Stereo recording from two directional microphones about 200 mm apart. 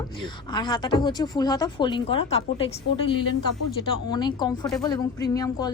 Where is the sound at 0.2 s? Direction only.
20° left (ahead or behind).